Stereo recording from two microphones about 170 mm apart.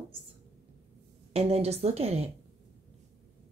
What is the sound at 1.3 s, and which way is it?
Speech, 35° right (ahead or behind).